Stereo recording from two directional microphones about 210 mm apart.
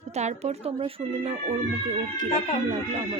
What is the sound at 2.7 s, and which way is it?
Speech, 25° right (ahead or behind).